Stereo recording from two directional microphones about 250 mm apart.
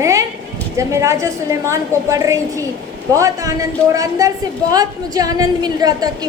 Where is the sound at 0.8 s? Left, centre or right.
Centre.